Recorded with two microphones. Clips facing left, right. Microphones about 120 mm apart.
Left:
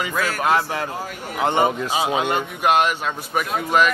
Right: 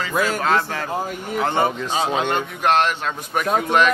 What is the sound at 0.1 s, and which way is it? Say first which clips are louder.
Speech: right 3 dB; 15° right (ahead or behind).